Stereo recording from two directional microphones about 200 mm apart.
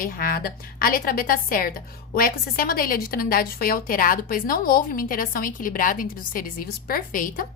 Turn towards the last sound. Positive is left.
turn(degrees=45)  # may be behind; listen again after turning